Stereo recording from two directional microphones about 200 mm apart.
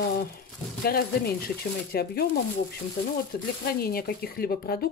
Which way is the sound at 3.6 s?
50° left (ahead or behind).